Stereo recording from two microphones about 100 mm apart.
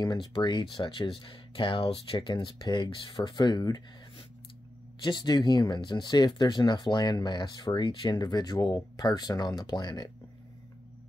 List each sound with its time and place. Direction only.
0.0 s speech: 50° left (ahead or behind)
5.0 s speech: 50° left (ahead or behind)